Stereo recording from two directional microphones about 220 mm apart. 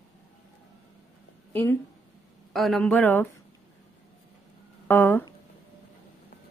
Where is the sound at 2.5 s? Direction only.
Centre (ahead or behind).